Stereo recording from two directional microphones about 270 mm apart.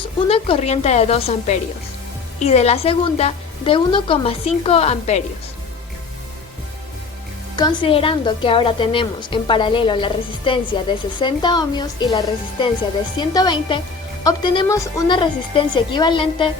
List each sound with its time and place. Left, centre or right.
0.3 s a woman's voice: left
7.5 s a woman's voice: centre